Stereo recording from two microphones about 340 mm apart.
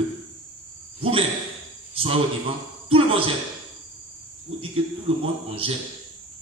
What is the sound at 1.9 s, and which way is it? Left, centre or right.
A man's voice, centre.